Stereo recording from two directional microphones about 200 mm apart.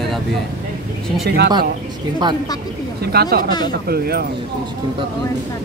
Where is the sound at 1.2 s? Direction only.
55° right (ahead or behind).